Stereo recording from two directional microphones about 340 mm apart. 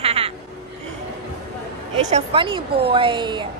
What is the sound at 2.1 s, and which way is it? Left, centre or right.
A woman's voice, centre.